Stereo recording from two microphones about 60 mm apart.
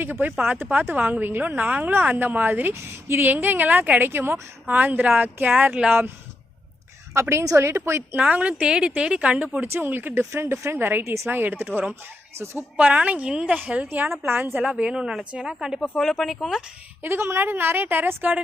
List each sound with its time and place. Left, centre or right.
0.0 s a woman's voice: right
4.6 s speech: right
7.1 s a woman's voice: right
8.2 s speech: right
9.6 s speech: right
10.3 s a woman's voice: right
12.7 s speech: centre
14.2 s speech: right
14.6 s speech: centre
16.0 s speech: centre
17.0 s speech: right